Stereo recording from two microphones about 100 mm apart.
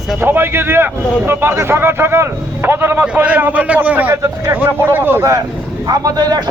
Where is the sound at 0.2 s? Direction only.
20° right (ahead or behind).